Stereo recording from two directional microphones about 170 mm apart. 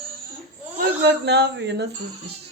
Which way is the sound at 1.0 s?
85° right.